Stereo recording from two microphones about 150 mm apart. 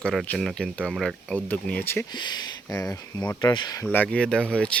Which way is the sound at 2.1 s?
30° left (ahead or behind).